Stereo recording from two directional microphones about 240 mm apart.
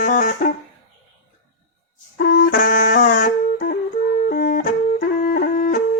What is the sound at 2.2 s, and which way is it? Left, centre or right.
Brass instrument, left.